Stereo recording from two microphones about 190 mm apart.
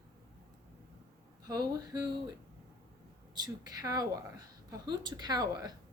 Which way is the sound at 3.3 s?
20° right (ahead or behind).